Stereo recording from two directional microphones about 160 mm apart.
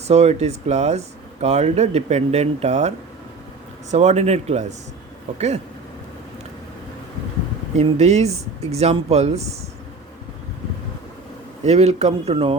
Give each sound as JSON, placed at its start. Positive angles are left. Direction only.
{"t": 0.1, "sound": "speech", "side_deg": -40}
{"t": 3.9, "sound": "speech", "side_deg": -45}
{"t": 7.8, "sound": "speech", "side_deg": -45}
{"t": 11.6, "sound": "speech", "side_deg": -40}